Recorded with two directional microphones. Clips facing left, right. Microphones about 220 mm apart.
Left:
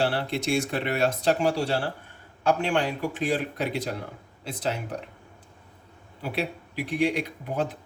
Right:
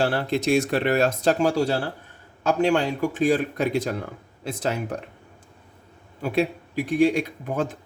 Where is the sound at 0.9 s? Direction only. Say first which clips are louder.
Even; 45° right (ahead or behind).